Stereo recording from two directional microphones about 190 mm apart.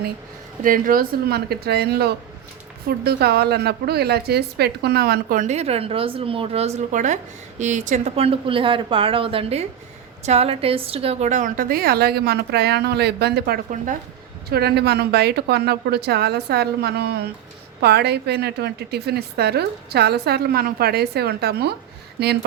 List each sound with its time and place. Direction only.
0.6 s a woman's voice: 45° right (ahead or behind)